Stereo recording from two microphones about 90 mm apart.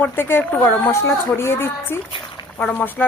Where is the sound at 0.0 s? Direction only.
25° left (ahead or behind).